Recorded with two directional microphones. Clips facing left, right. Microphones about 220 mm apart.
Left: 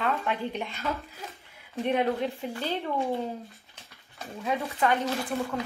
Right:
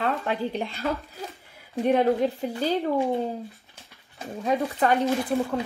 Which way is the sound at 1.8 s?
45° right (ahead or behind).